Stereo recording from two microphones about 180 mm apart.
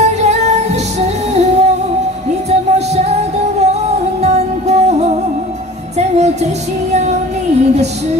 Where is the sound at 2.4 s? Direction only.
35° right (ahead or behind).